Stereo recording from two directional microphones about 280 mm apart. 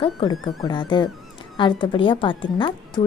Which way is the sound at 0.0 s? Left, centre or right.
Centre.